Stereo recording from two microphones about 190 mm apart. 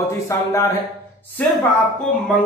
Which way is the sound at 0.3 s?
15° left (ahead or behind).